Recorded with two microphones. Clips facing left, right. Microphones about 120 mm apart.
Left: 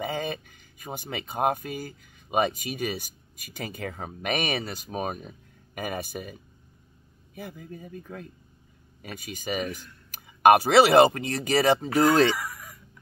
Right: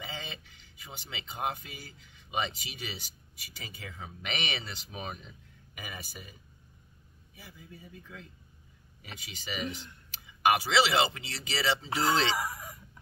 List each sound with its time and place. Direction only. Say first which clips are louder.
0.0 s speech: left 12 dB; 50° left (ahead or behind)
7.3 s speech: left 11 dB; 55° left (ahead or behind)
12.3 s fowl: left 3 dB; 25° right (ahead or behind)